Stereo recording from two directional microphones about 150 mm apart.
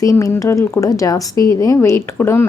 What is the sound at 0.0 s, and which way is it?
Speech, 20° left (ahead or behind).